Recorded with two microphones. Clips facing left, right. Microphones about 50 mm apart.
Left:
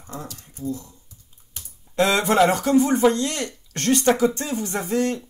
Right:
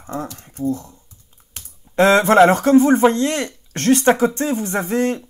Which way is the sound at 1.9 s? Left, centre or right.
Right.